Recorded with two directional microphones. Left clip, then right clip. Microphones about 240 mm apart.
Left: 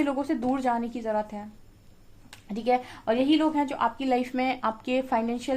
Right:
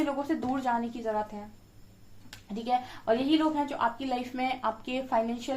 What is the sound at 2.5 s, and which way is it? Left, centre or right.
A woman's voice, left.